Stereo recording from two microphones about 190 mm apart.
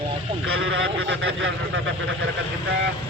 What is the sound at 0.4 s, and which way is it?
Speech, 90° right.